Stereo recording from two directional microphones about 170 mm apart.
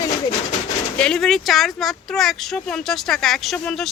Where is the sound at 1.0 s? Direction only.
5° left (ahead or behind).